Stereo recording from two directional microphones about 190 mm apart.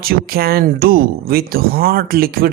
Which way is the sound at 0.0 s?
50° right (ahead or behind).